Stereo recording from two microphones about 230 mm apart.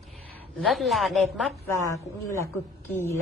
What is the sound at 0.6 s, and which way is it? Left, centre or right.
Speech, centre.